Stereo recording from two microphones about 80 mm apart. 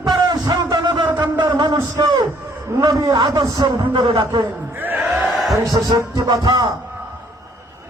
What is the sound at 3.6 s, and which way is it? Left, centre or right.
Speech, right.